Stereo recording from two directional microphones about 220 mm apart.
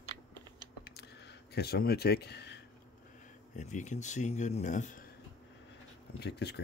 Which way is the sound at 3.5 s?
30° left (ahead or behind).